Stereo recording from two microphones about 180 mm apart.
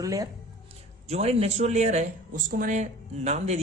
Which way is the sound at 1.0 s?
35° right (ahead or behind).